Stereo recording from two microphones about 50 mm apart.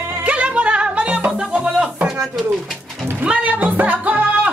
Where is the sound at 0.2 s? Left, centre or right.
Right.